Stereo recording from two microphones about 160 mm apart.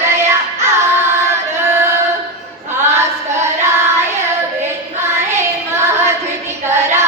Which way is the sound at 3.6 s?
15° right (ahead or behind).